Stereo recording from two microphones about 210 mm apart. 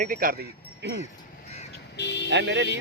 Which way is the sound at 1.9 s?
55° left (ahead or behind).